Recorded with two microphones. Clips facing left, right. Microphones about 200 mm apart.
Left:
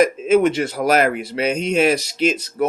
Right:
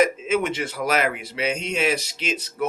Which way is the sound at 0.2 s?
50° left (ahead or behind).